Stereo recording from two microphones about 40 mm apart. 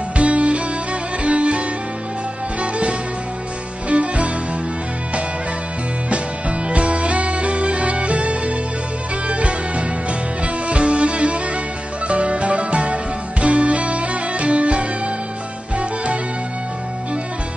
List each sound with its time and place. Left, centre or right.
0.2 s music: right
6.7 s music: right